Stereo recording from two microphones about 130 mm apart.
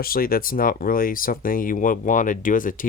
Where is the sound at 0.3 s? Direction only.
90° left.